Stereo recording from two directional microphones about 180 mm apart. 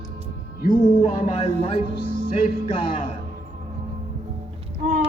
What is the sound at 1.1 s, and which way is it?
Speech, 30° left (ahead or behind).